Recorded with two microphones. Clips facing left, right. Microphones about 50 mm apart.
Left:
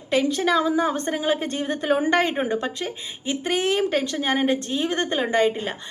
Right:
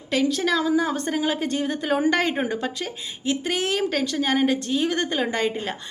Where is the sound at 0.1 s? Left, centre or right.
Left.